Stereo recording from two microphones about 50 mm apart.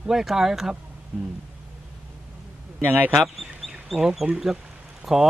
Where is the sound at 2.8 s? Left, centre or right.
Right.